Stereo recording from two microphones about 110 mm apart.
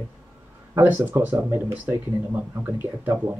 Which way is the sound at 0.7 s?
20° right (ahead or behind).